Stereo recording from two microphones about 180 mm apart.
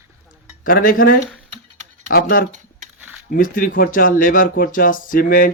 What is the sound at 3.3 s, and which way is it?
Speech, 50° left (ahead or behind).